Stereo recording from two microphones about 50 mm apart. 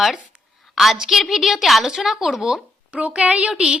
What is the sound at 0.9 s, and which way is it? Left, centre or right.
A woman's voice, centre.